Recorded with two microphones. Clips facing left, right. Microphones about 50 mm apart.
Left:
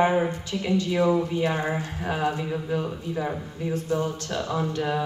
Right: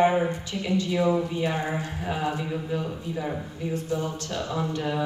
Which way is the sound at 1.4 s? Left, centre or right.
Left.